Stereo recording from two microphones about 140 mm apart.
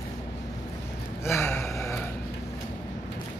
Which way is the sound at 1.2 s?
20° left (ahead or behind).